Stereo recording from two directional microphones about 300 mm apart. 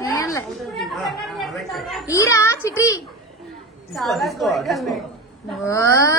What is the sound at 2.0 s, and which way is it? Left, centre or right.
A child's voice, centre.